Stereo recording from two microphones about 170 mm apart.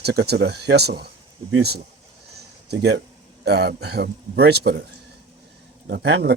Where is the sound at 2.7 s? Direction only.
80° right.